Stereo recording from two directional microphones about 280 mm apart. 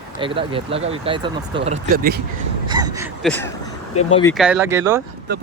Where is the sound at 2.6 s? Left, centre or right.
Centre.